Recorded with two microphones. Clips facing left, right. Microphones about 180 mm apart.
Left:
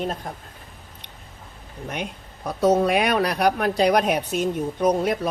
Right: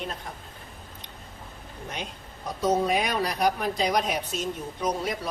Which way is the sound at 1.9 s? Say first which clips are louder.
Left 6 dB; 60° left (ahead or behind).